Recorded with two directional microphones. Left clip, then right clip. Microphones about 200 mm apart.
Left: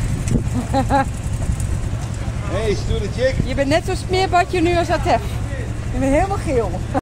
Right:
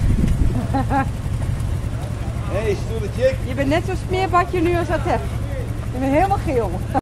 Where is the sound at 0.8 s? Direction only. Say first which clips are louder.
Left 4 dB; 60° left (ahead or behind).